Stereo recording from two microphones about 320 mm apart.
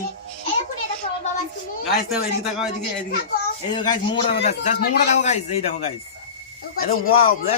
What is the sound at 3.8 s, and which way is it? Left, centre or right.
A man's voice, centre.